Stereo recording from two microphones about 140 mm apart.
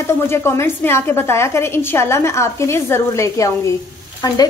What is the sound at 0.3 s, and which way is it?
Speech, 20° left (ahead or behind).